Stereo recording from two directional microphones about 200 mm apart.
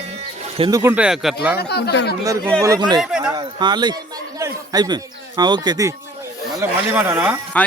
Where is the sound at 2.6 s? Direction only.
20° right (ahead or behind).